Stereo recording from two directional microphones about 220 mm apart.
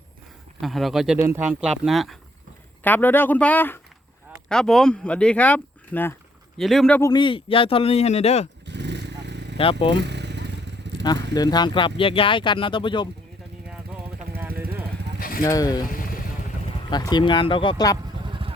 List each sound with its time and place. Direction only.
0.6 s speech: centre (ahead or behind)
7.1 s speech: 20° left (ahead or behind)
8.6 s vehicle: 50° right (ahead or behind)
9.2 s a sound: 50° right (ahead or behind)
9.6 s speech: 25° left (ahead or behind)
10.0 s motorcycle: 50° right (ahead or behind)
10.8 s vehicle: 50° right (ahead or behind)
11.3 s speech: 20° left (ahead or behind)
13.7 s a sound: 10° right (ahead or behind)
15.2 s vehicle: 40° left (ahead or behind)
15.4 s speech: 15° left (ahead or behind)
16.9 s speech: 20° left (ahead or behind)
18.3 s vehicle: 25° right (ahead or behind)